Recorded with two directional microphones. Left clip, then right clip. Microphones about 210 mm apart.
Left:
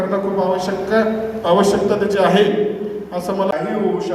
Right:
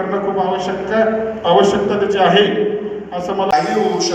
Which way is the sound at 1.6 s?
45° left (ahead or behind).